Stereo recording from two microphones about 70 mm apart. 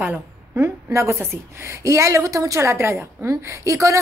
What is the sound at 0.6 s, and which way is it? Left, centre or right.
A woman's voice, right.